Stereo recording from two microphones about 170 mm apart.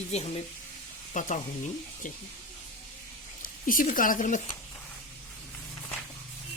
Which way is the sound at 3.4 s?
55° left (ahead or behind).